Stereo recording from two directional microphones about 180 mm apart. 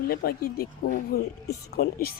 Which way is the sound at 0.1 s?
55° left (ahead or behind).